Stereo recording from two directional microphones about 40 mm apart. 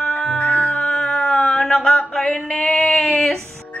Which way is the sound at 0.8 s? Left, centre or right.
Centre.